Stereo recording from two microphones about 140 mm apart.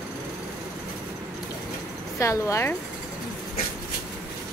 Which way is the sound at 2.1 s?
20° left (ahead or behind).